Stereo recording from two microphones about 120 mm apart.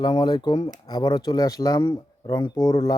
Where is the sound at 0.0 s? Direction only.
35° left (ahead or behind).